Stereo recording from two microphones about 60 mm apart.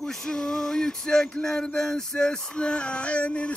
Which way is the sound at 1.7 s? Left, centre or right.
Centre.